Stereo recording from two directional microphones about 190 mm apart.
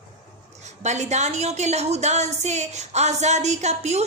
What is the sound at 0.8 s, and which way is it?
A woman's voice, 35° right (ahead or behind).